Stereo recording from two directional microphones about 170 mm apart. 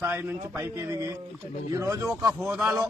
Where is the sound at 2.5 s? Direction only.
5° right (ahead or behind).